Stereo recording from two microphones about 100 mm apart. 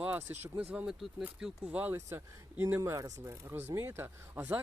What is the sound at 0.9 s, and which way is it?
Speech, 5° right (ahead or behind).